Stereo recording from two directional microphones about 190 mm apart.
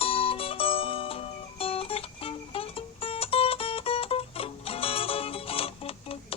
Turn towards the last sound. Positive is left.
turn(degrees=30)  # may be behind; listen again after turning